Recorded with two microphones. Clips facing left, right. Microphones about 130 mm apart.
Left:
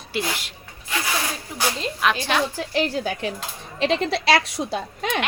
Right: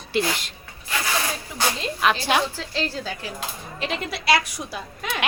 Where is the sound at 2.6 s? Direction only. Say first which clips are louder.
Left 5 dB; 15° left (ahead or behind).